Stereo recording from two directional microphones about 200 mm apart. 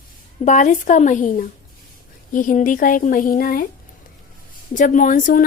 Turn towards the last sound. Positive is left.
turn(degrees=40)  # may be behind; listen again after turning